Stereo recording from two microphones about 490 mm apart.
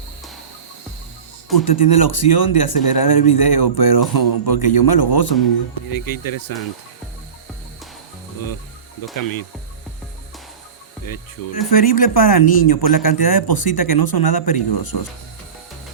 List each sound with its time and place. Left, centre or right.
1.5 s speech: left
9.1 s speech: left
11.7 s speech: left